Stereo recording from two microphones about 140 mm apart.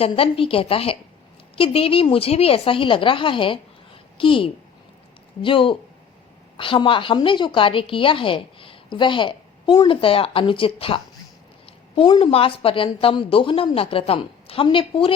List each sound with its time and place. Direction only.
0.0 s a woman's voice: 40° left (ahead or behind)